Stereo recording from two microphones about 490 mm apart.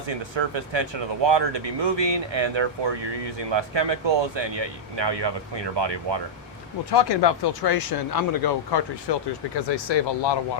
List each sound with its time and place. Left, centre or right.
0.1 s speech: right
6.9 s speech: left